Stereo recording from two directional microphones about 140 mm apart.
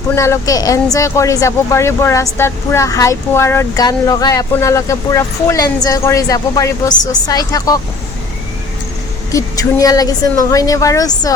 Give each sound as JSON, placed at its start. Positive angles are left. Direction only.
{"t": 0.2, "sound": "speech", "side_deg": 25}
{"t": 9.3, "sound": "speech", "side_deg": 25}